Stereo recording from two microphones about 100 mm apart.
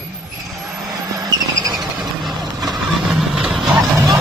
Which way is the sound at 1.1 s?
40° right (ahead or behind).